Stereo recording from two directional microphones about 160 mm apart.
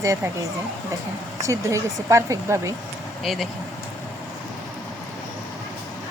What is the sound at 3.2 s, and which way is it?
Speech, centre (ahead or behind).